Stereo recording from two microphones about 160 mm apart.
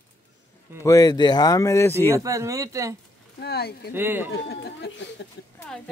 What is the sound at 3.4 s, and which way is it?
Speech, 85° left.